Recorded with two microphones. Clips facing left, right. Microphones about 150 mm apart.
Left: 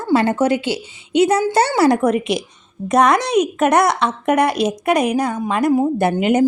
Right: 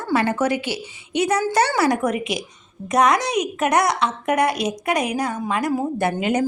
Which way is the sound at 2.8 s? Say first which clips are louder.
Left 3 dB; 60° left (ahead or behind).